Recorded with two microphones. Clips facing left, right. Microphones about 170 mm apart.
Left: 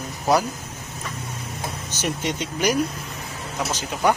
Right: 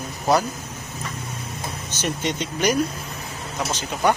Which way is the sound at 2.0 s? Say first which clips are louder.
Right 1 dB; 10° left (ahead or behind).